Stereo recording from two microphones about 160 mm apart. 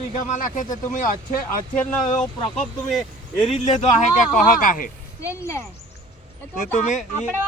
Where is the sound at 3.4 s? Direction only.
40° left (ahead or behind).